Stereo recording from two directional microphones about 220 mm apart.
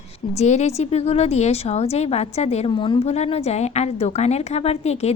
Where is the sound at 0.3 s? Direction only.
30° left (ahead or behind).